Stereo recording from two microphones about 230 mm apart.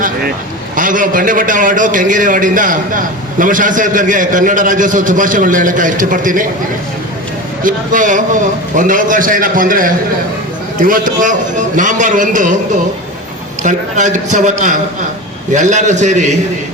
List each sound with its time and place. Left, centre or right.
0.0 s a sound: right
0.8 s a man's voice: right
7.6 s a man's voice: right
13.6 s a man's voice: right